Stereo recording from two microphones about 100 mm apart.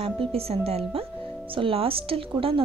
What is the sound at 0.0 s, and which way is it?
A woman's voice, 75° right (ahead or behind).